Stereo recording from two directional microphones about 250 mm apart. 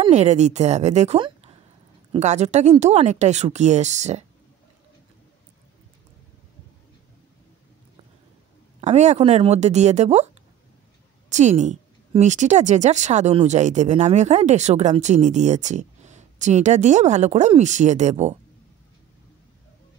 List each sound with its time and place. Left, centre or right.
0.0 s a woman's voice: right
8.8 s a woman's voice: right